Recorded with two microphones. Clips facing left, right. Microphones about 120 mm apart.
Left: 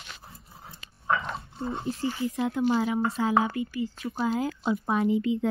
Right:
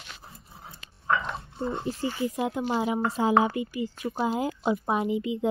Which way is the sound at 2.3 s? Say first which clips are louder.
Left 2 dB; 20° right (ahead or behind).